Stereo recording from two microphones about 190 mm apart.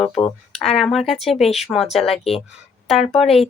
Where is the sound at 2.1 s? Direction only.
30° left (ahead or behind).